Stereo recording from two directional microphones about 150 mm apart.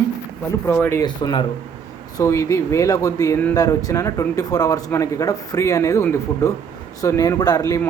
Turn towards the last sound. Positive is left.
turn(degrees=20)  # may be behind; listen again after turning